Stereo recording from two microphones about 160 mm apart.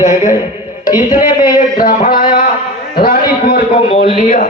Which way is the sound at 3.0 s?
70° left (ahead or behind).